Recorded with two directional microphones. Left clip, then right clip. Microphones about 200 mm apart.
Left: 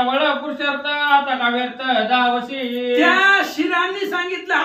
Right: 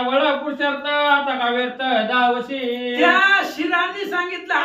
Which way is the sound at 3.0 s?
5° left (ahead or behind).